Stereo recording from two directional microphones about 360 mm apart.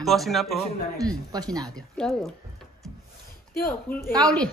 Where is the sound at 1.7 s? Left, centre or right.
Centre.